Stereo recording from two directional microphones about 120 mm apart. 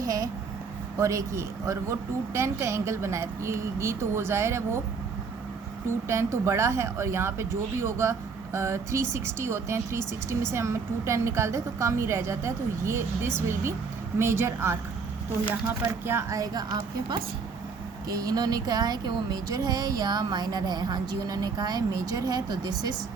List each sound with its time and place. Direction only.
0.0 s a sound: 30° right (ahead or behind)
0.9 s speech: 25° right (ahead or behind)
6.1 s speech: 25° right (ahead or behind)
14.2 s speech: 20° right (ahead or behind)
15.8 s speech: 25° right (ahead or behind)